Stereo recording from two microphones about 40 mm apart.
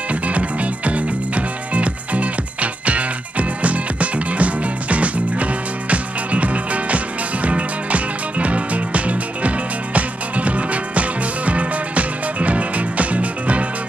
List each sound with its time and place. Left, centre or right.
0.1 s music: right